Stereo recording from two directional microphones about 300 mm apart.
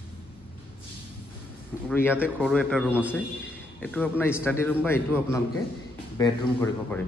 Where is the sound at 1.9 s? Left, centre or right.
Centre.